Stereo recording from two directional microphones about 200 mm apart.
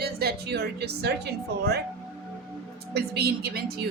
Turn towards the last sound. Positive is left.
turn(degrees=-50)  # may be behind; listen again after turning